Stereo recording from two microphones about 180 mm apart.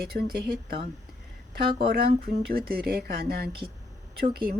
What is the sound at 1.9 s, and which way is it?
A woman's voice, 60° right (ahead or behind).